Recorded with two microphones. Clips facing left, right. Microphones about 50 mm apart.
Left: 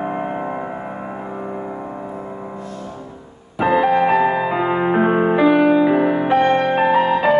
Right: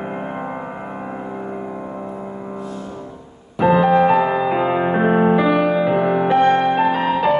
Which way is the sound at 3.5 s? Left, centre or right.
Centre.